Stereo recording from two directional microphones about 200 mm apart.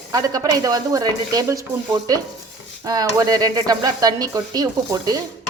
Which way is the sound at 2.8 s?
20° right (ahead or behind).